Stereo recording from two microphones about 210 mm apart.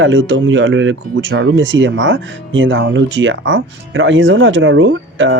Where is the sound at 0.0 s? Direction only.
65° right (ahead or behind).